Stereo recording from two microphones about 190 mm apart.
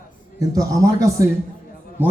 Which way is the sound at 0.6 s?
15° right (ahead or behind).